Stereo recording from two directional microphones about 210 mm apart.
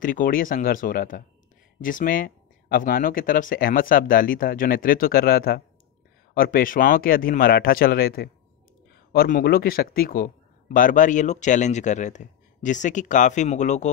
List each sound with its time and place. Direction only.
0.0 s a man's voice: 40° left (ahead or behind)